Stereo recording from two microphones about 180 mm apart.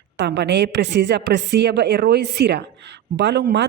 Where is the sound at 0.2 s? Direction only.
70° right (ahead or behind).